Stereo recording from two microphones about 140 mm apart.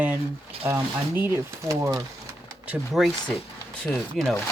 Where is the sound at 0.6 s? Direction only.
15° right (ahead or behind).